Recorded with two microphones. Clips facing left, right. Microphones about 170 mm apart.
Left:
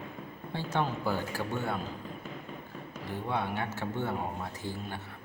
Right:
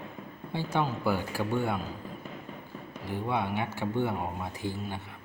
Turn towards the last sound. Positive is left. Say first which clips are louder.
# right 3 dB
turn(degrees=-15)  # may be behind; listen again after turning